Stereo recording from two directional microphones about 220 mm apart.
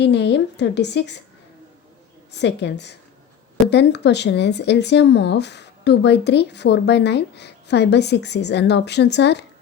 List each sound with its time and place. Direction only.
0.0 s speech: 50° left (ahead or behind)
2.3 s speech: 50° left (ahead or behind)